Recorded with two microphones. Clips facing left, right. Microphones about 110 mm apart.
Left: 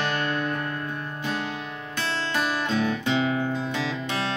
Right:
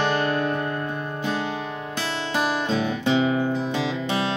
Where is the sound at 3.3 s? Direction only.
15° right (ahead or behind).